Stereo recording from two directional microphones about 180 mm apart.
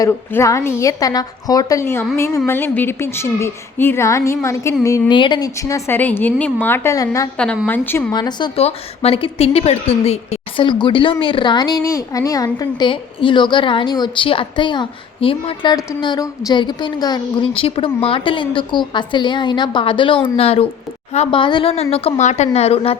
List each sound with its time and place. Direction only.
0.0 s a woman's voice: 15° left (ahead or behind)
7.3 s a woman's voice: 5° left (ahead or behind)
8.1 s a woman's voice: 25° left (ahead or behind)